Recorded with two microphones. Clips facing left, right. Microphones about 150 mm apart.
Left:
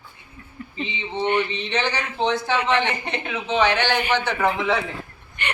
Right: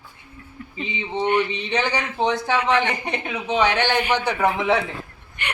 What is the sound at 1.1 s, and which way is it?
A woman's voice, 15° right (ahead or behind).